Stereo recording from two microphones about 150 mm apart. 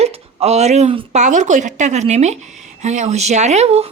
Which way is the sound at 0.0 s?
45° right (ahead or behind).